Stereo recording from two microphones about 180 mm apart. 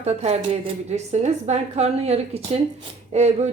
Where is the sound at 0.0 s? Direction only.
40° right (ahead or behind).